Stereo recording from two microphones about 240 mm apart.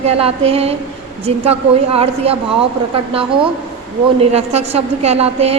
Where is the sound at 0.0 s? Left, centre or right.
Right.